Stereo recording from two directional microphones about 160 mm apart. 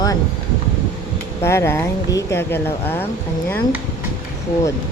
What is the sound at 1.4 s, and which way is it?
Speech, 15° left (ahead or behind).